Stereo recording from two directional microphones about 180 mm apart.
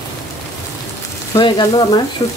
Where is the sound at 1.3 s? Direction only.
20° left (ahead or behind).